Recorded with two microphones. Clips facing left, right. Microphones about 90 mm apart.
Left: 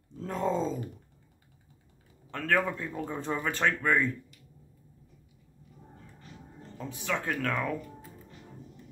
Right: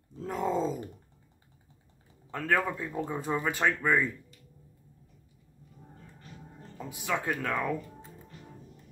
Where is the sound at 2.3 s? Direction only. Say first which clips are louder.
Even; 10° right (ahead or behind).